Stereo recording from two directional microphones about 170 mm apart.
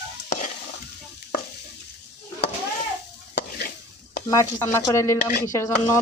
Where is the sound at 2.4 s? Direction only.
80° left.